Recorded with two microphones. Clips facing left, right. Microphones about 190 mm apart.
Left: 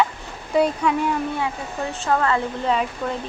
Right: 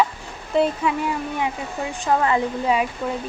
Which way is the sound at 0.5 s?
Centre (ahead or behind).